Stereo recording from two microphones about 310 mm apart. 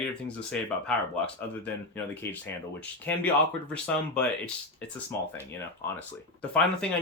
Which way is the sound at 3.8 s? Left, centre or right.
Centre.